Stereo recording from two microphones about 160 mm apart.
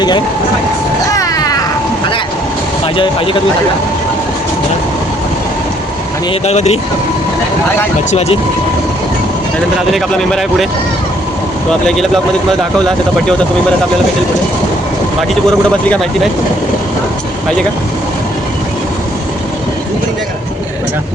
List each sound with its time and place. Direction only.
1.1 s a sound: 20° left (ahead or behind)
2.8 s speech: 35° left (ahead or behind)
6.4 s speech: 40° left (ahead or behind)
9.9 s speech: centre (ahead or behind)
11.7 s speech: centre (ahead or behind)